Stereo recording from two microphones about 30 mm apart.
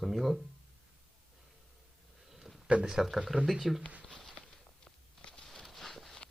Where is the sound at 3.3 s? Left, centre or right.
Right.